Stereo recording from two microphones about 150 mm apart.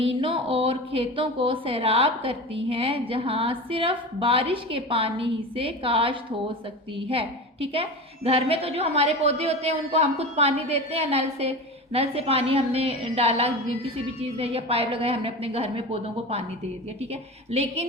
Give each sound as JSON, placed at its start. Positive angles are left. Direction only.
{"t": 0.0, "sound": "a woman's voice", "side_deg": -35}